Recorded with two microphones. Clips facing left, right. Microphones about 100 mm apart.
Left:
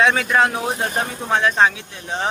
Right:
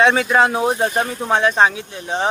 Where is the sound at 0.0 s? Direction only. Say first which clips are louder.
Right 2 dB; 25° right (ahead or behind).